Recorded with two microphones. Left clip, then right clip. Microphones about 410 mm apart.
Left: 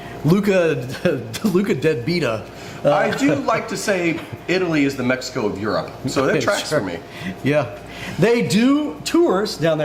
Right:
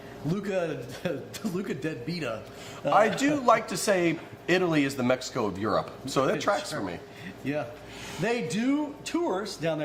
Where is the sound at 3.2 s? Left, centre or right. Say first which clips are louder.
Left 4 dB; right.